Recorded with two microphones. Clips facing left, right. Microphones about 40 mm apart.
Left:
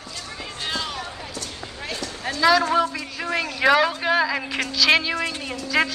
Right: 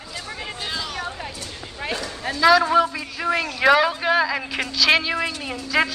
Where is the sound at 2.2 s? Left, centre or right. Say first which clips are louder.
Right 2 dB; centre.